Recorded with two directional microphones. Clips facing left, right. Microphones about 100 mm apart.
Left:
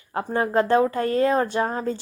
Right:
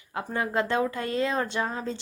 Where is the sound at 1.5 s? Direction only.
40° left (ahead or behind).